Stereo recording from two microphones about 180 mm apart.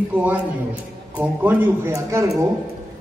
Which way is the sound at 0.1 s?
10° right (ahead or behind).